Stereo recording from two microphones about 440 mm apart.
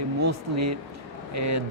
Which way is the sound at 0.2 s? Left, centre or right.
Right.